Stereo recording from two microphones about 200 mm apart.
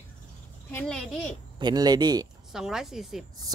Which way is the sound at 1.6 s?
20° right (ahead or behind).